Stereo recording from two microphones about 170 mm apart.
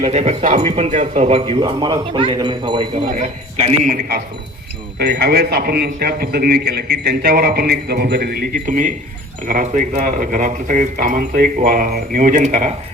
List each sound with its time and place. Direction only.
0.0 s speech: 40° right (ahead or behind)
3.8 s a man's voice: 55° right (ahead or behind)